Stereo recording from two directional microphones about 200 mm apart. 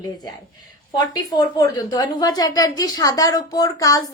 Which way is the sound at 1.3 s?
20° left (ahead or behind).